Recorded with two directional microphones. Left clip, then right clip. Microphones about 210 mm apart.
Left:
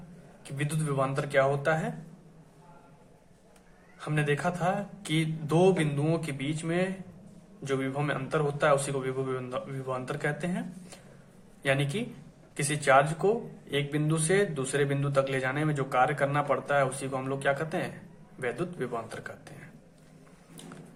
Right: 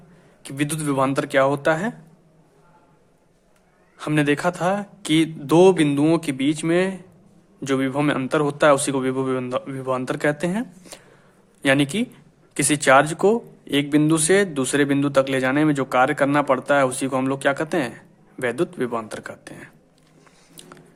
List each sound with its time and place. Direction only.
0.4 s speech: 55° right (ahead or behind)
3.9 s speech: 50° right (ahead or behind)